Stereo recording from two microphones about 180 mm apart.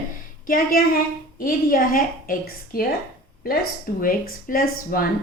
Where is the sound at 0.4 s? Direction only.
50° left (ahead or behind).